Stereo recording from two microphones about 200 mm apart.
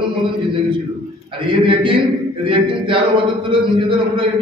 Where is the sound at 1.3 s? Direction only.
25° right (ahead or behind).